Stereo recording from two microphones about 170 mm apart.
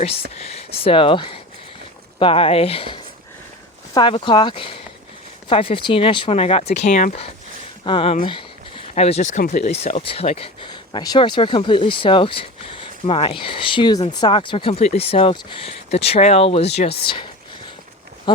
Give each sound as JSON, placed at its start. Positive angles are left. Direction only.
{"t": 0.3, "sound": "speech", "side_deg": 35}
{"t": 7.9, "sound": "speech", "side_deg": 30}
{"t": 8.2, "sound": "a sound", "side_deg": 30}
{"t": 9.4, "sound": "speech", "side_deg": 45}